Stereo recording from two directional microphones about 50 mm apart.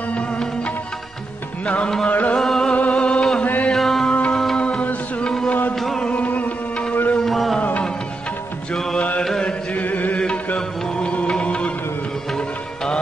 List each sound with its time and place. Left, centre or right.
0.1 s music: left
2.0 s music: left
2.3 s music: centre
2.7 s music: left
3.4 s music: left
3.7 s music: centre
4.1 s music: left
5.5 s music: left
7.2 s a sound: centre
8.9 s mantra: left
9.2 s mantra: centre
9.8 s music: left
10.2 s music: left